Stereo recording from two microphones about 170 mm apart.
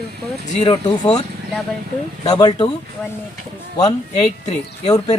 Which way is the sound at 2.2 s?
25° left (ahead or behind).